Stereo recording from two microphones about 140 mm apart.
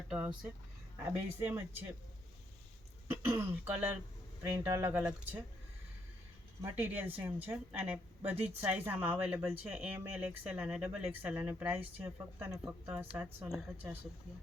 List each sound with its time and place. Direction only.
0.1 s a woman's voice: 10° right (ahead or behind)
1.4 s a woman's voice: 15° right (ahead or behind)
3.1 s a woman's voice: 15° right (ahead or behind)
6.6 s a woman's voice: 15° right (ahead or behind)